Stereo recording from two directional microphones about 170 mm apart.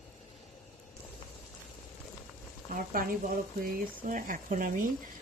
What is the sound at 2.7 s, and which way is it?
Speech, 60° right (ahead or behind).